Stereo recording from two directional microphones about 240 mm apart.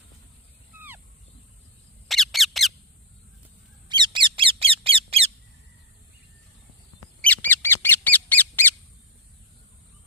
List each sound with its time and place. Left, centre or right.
2.0 s squeak: centre
3.8 s bird: centre
7.2 s bird: centre